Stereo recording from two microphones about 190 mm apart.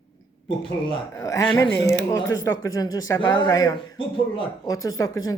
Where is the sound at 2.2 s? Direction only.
80° left.